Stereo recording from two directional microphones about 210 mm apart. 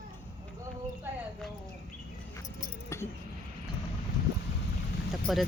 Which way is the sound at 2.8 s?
15° left (ahead or behind).